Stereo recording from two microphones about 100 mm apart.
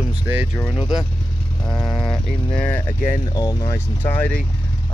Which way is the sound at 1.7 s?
40° left (ahead or behind).